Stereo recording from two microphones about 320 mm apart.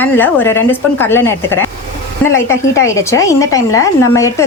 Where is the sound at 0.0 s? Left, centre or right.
Centre.